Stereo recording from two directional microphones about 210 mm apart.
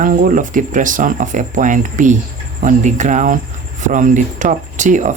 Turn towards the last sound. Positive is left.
turn(degrees=-35)  # may be behind; listen again after turning